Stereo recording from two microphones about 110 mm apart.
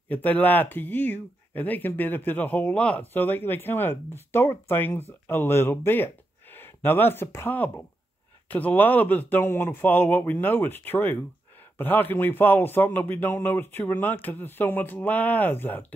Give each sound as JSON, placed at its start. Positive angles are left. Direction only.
{"t": 0.1, "sound": "speech", "side_deg": 15}